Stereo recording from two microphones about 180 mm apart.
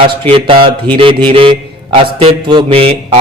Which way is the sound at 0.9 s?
30° right (ahead or behind).